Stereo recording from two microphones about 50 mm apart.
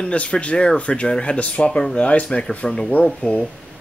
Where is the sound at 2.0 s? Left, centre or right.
Left.